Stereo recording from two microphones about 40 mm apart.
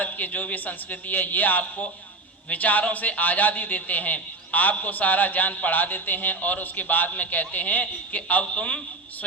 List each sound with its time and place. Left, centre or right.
0.0 s speech: left